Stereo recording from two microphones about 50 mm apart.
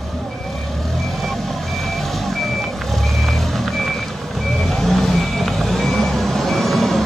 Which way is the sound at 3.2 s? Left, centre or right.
Centre.